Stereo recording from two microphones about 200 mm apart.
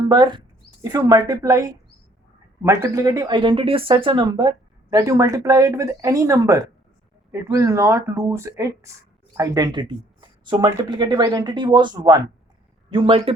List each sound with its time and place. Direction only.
0.0 s speech: 20° right (ahead or behind)